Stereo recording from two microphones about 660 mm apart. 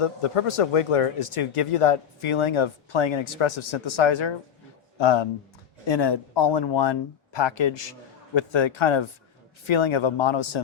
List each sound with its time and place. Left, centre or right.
0.0 s speech: left